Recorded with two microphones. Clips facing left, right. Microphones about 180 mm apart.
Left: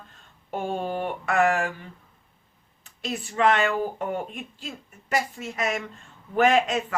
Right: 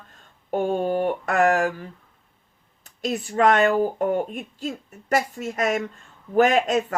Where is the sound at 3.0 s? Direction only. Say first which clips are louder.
Right 3 dB; 40° right (ahead or behind).